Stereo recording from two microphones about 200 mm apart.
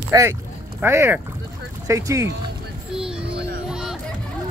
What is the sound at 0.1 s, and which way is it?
Speech, 15° right (ahead or behind).